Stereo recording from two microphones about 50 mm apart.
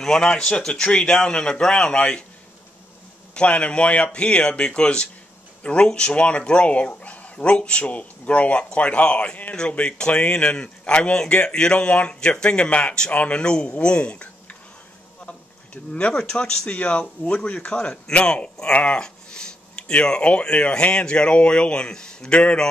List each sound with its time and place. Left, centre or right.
0.0 s speech: centre
3.3 s speech: left
13.4 s speech: centre
15.2 s a sound: left
16.1 s speech: centre